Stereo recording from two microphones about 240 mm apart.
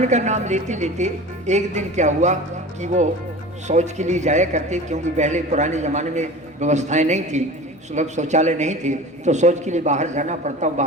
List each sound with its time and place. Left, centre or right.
0.0 s speech: right